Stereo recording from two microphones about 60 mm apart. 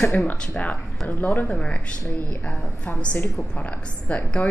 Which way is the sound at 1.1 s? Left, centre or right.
Left.